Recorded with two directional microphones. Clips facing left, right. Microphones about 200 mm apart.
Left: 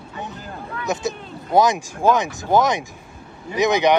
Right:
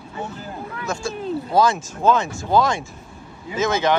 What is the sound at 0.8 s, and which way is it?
Speech, 20° left (ahead or behind).